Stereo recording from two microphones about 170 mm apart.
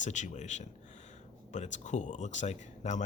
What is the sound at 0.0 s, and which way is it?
Speech, 45° left (ahead or behind).